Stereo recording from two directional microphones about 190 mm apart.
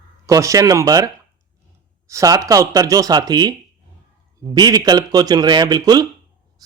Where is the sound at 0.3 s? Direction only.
15° right (ahead or behind).